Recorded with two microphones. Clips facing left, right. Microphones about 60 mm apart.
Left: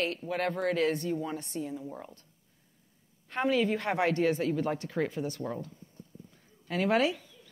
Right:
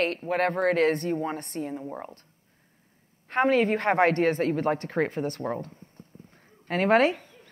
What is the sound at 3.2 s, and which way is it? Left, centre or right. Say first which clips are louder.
A woman's voice: right 6 dB; right.